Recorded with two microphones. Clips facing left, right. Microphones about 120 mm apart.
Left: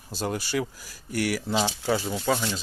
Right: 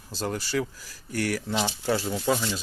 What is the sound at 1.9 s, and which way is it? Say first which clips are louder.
Speech: right 1 dB; centre (ahead or behind).